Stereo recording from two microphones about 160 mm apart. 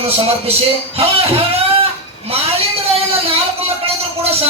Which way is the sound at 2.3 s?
40° right (ahead or behind).